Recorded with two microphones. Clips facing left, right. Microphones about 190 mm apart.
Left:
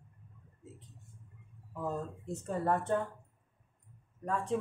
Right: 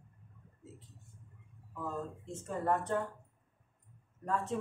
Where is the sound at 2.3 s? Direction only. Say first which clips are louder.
Left 2 dB; 25° left (ahead or behind).